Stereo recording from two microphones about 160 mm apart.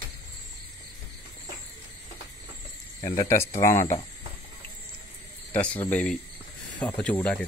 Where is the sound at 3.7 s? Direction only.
50° left (ahead or behind).